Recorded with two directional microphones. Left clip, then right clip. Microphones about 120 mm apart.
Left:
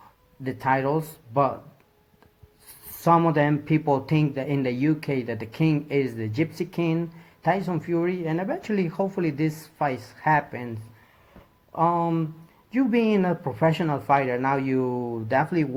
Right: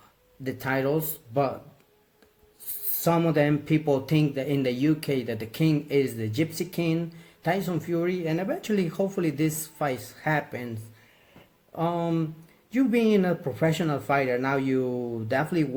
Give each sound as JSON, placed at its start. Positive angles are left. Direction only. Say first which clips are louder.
{"t": 0.4, "sound": "speech", "louder": "left 3 dB", "side_deg": -20}
{"t": 3.0, "sound": "speech", "louder": "left 4 dB", "side_deg": -20}
{"t": 11.8, "sound": "speech", "louder": "left 5 dB", "side_deg": -25}